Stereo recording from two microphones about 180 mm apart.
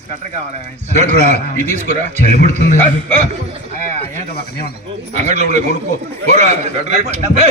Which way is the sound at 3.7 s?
45° right (ahead or behind).